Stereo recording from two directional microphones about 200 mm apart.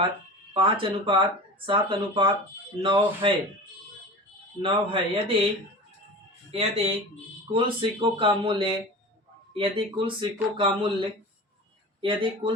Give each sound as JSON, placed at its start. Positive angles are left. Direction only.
{"t": 0.5, "sound": "speech", "side_deg": -25}
{"t": 4.6, "sound": "speech", "side_deg": -25}
{"t": 6.5, "sound": "speech", "side_deg": -30}
{"t": 11.9, "sound": "speech", "side_deg": -25}